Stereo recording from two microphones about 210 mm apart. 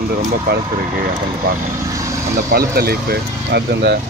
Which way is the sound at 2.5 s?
45° right (ahead or behind).